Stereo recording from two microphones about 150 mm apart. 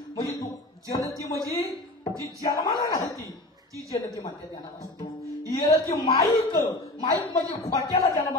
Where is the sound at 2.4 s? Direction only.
20° left (ahead or behind).